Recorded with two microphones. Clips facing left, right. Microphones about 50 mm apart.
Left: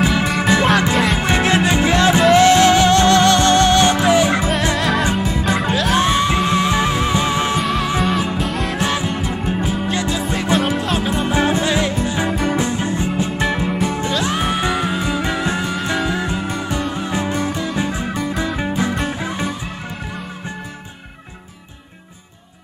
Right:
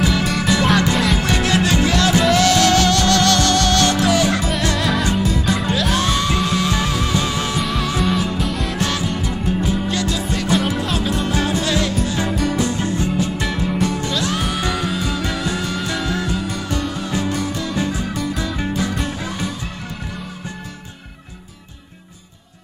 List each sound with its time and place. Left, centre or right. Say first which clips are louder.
0.0 s music: left 2 dB; left
0.9 s music: left 2 dB; centre
1.2 s music: left 2 dB; left
4.7 s music: left 1 dB; centre
5.9 s music: left 3 dB; left
7.6 s music: left 2 dB; centre
8.7 s music: left 2 dB; centre